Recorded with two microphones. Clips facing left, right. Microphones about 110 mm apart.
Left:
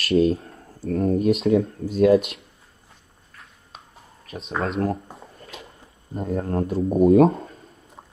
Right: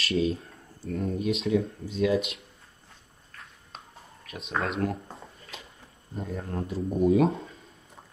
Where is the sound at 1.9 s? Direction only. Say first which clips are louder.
Left 9 dB; 50° left (ahead or behind).